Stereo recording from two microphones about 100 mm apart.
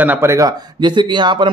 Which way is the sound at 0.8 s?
50° right (ahead or behind).